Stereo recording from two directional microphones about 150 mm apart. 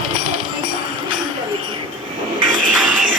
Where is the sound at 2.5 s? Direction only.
65° right (ahead or behind).